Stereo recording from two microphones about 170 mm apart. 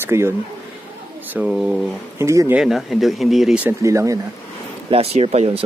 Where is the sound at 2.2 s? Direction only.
15° right (ahead or behind).